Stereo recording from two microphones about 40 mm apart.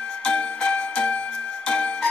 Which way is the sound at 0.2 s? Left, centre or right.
Left.